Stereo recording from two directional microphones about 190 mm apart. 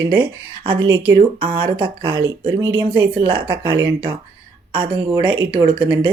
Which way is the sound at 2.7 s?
10° right (ahead or behind).